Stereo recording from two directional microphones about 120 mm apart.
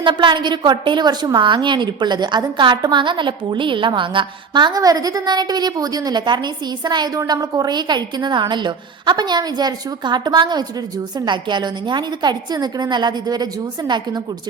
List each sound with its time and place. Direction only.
0.0 s a woman's voice: 40° right (ahead or behind)